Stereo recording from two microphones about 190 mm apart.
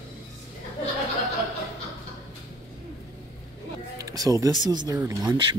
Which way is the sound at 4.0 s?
20° right (ahead or behind).